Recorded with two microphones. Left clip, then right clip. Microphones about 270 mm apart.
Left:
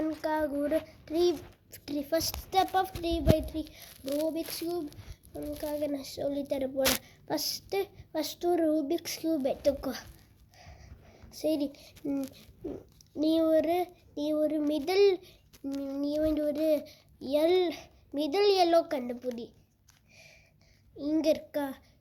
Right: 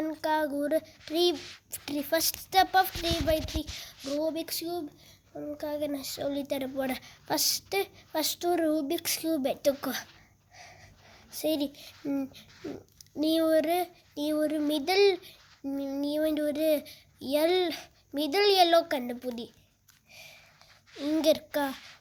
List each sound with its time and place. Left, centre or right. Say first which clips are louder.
0.0 s child singing: right 2 dB; right
11.3 s child singing: right 1 dB; right
20.1 s a sound: right 6 dB; right
21.0 s child singing: right 2 dB; right